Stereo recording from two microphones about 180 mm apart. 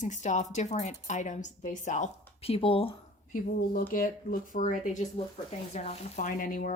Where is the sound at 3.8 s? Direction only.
50° left (ahead or behind).